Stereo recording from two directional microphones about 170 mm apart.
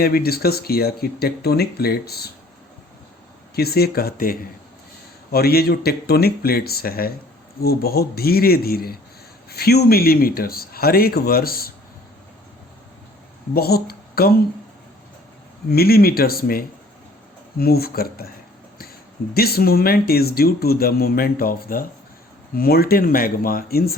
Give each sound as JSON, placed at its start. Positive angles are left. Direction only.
{"t": 0.0, "sound": "speech", "side_deg": 65}
{"t": 3.5, "sound": "speech", "side_deg": 65}
{"t": 13.5, "sound": "speech", "side_deg": 65}
{"t": 15.7, "sound": "speech", "side_deg": 65}
{"t": 19.3, "sound": "speech", "side_deg": 65}